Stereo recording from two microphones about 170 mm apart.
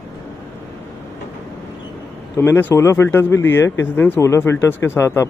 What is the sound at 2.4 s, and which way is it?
Speech, 15° left (ahead or behind).